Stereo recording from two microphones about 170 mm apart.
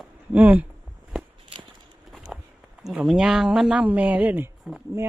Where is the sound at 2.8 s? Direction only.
5° right (ahead or behind).